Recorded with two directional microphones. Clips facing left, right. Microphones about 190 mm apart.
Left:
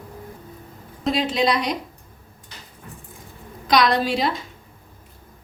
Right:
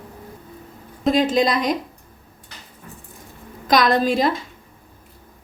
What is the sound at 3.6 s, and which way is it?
Speech, 50° right (ahead or behind).